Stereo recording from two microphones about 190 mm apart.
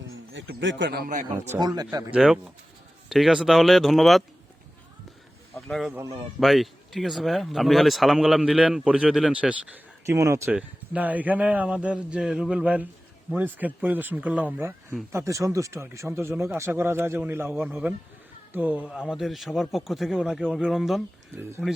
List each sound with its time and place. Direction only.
0.3 s speech: 70° right (ahead or behind); by 1.5 s 45° right (ahead or behind)
1.5 s a man's voice: 20° right (ahead or behind)
2.1 s speech: 5° right (ahead or behind)
5.5 s speech: 5° left (ahead or behind)